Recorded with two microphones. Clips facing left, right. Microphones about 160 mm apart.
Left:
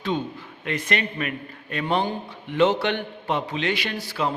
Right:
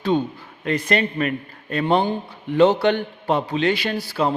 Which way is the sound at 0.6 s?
35° right (ahead or behind).